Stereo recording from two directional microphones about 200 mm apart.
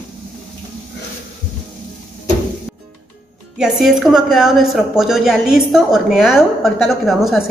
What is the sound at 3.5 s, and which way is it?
A woman's voice, centre (ahead or behind).